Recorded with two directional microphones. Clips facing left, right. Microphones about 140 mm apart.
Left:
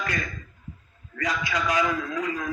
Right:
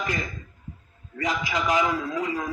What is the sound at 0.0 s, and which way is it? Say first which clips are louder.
A man's voice: right 1 dB; 25° right (ahead or behind).